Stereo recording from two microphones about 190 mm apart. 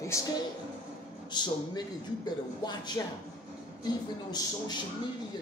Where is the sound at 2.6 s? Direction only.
20° left (ahead or behind).